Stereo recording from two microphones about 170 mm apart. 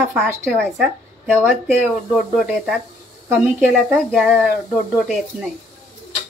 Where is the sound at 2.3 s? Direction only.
Centre (ahead or behind).